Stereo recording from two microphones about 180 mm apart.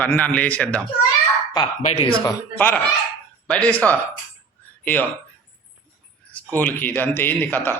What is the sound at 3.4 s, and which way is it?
A man's voice, 5° left (ahead or behind).